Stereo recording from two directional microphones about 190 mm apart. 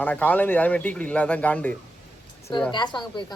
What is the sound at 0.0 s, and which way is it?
A woman's voice, 10° left (ahead or behind).